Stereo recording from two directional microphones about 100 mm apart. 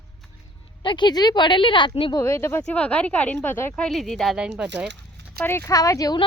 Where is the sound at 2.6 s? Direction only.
10° left (ahead or behind).